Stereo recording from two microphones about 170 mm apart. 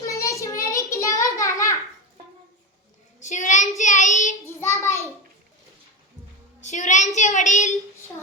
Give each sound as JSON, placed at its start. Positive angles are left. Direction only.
{"t": 0.1, "sound": "child singing", "side_deg": 20}
{"t": 3.2, "sound": "child singing", "side_deg": 45}
{"t": 4.4, "sound": "child singing", "side_deg": 15}
{"t": 6.6, "sound": "a sound", "side_deg": 45}